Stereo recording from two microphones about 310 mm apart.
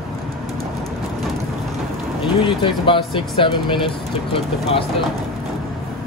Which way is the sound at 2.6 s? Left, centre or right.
Centre.